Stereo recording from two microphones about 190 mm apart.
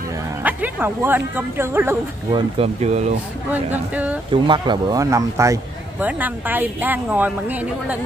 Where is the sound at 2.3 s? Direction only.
35° right (ahead or behind).